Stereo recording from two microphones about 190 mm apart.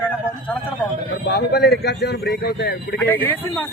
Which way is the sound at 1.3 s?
60° left (ahead or behind).